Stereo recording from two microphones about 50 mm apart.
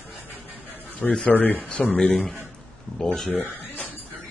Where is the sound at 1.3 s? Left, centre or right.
Left.